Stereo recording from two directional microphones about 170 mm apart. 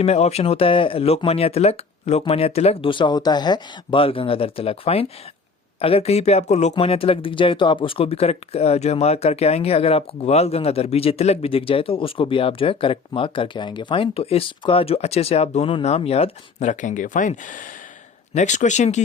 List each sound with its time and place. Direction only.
0.0 s speech: 40° left (ahead or behind)